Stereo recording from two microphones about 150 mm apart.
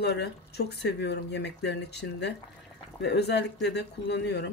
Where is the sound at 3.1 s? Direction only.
90° left.